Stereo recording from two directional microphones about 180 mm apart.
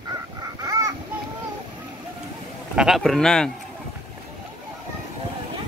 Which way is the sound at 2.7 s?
Centre (ahead or behind).